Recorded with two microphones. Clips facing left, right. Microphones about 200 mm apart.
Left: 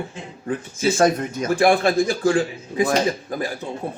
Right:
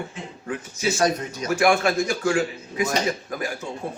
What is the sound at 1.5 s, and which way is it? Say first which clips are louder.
A man's voice: left 3 dB; 35° left (ahead or behind).